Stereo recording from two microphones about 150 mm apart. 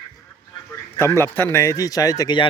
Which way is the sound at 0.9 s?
15° left (ahead or behind).